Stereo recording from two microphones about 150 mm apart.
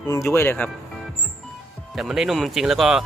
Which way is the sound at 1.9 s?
5° right (ahead or behind).